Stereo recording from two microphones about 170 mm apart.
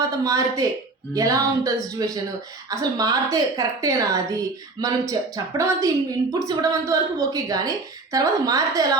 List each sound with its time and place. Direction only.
0.3 s speech: 20° right (ahead or behind)